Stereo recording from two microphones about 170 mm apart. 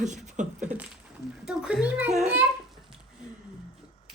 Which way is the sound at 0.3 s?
45° right (ahead or behind).